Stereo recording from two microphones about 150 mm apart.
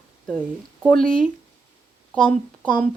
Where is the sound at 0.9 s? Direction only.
5° left (ahead or behind).